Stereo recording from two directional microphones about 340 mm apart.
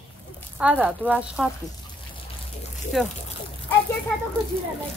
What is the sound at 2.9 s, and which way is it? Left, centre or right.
Speech, centre.